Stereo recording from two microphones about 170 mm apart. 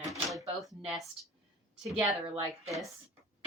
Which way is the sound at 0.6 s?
5° right (ahead or behind).